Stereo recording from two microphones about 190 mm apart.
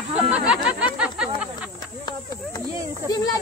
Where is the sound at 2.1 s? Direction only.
20° left (ahead or behind).